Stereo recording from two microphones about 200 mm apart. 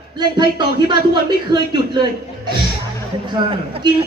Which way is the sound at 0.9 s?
25° right (ahead or behind).